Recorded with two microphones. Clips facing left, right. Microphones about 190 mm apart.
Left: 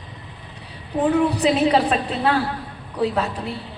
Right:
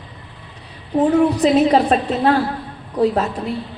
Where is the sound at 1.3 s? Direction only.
35° right (ahead or behind).